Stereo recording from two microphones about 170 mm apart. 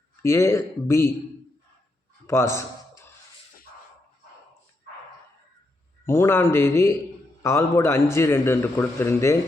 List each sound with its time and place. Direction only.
0.2 s a man's voice: 15° left (ahead or behind)
2.2 s a sound: 15° left (ahead or behind)
6.1 s a man's voice: 15° left (ahead or behind)